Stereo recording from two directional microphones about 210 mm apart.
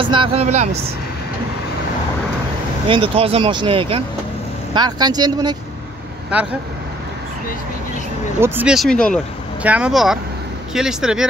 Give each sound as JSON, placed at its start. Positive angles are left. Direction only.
{"t": 0.0, "sound": "speech", "side_deg": -25}
{"t": 2.9, "sound": "speech", "side_deg": -25}
{"t": 8.4, "sound": "speech", "side_deg": -5}